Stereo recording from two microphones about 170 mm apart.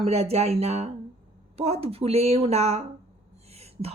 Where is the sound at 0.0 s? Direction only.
35° right (ahead or behind).